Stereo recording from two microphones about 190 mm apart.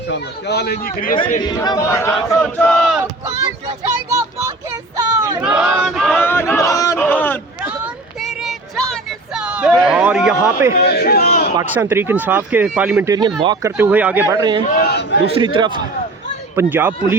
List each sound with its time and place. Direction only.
0.1 s speech: 60° left (ahead or behind)
1.4 s choir: 20° left (ahead or behind)
2.3 s battle cry: 5° left (ahead or behind)
3.2 s a sound: 15° right (ahead or behind)
5.4 s a sound: 5° right (ahead or behind)
10.8 s speech: 60° left (ahead or behind)
11.6 s speech: 10° right (ahead or behind)
13.4 s speech: 20° right (ahead or behind)
14.7 s a man's voice: 55° left (ahead or behind)
15.4 s a man's voice: 25° right (ahead or behind)
16.6 s speech: 10° right (ahead or behind)